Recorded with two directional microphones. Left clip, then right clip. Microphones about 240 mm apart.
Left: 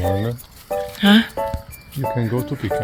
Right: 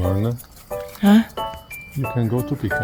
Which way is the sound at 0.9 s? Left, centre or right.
Centre.